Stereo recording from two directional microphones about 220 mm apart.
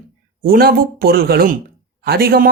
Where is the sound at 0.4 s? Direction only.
45° right (ahead or behind).